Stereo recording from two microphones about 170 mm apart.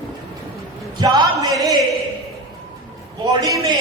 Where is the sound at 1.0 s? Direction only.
20° right (ahead or behind).